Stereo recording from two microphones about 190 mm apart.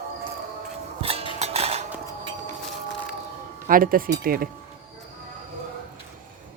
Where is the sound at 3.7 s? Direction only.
50° right (ahead or behind).